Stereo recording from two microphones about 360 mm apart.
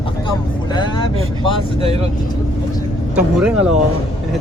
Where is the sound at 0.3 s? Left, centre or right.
Centre.